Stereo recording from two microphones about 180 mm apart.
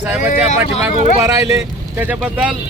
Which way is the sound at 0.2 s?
40° left (ahead or behind).